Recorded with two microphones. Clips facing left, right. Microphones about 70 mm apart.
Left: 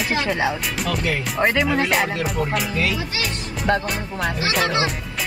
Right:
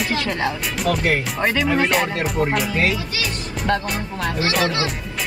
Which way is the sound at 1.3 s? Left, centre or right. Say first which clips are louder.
Left 2 dB; centre.